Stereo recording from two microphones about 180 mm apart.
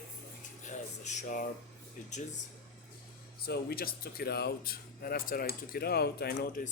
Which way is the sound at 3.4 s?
60° left (ahead or behind).